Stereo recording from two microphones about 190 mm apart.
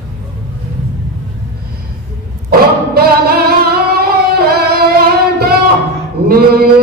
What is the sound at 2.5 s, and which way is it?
Music, 55° right (ahead or behind).